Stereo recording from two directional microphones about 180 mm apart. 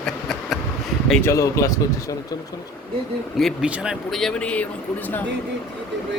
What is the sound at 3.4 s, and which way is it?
Speech, 5° right (ahead or behind).